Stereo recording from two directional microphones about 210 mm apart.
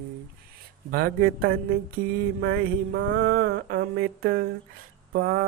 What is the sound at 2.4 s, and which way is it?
Mantra, 55° right (ahead or behind).